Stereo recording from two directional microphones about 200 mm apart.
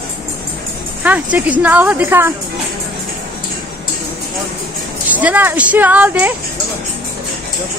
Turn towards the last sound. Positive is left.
turn(degrees=-10)  # may be behind; listen again after turning